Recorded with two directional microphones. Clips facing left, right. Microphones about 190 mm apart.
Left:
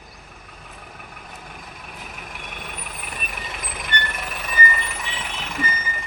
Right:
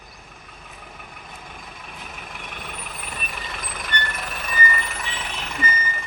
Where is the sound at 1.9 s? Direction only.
5° left (ahead or behind).